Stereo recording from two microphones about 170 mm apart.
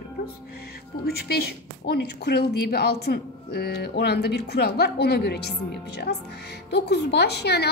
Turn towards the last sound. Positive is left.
turn(degrees=75)  # may be behind; listen again after turning